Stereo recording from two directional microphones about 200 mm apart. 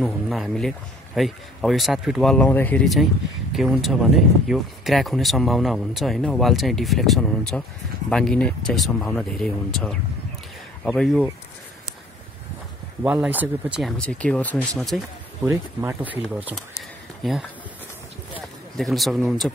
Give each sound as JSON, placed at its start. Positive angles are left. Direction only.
{"t": 0.0, "sound": "speech", "side_deg": 0}
{"t": 13.0, "sound": "speech", "side_deg": -5}
{"t": 15.4, "sound": "speech", "side_deg": -15}